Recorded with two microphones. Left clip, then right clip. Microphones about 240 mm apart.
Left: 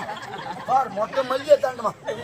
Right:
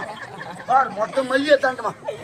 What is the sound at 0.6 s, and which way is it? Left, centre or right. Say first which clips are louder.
A man's voice: right 3 dB; left.